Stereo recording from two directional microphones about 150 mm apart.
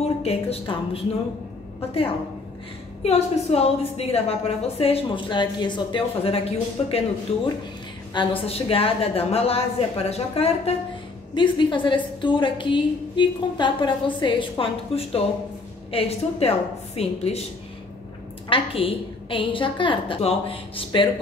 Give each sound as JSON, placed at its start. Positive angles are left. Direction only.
{"t": 0.0, "sound": "speech", "side_deg": 40}
{"t": 3.0, "sound": "a woman's voice", "side_deg": 45}
{"t": 18.5, "sound": "a woman's voice", "side_deg": 40}